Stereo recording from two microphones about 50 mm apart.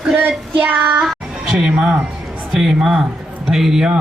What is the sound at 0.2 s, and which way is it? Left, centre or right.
Child singing, right.